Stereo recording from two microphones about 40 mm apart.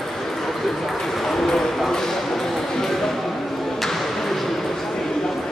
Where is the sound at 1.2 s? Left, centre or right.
Centre.